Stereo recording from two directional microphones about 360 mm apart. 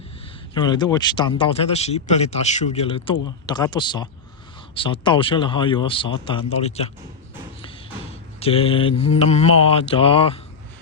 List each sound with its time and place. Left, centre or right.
0.5 s speech: centre
8.4 s speech: centre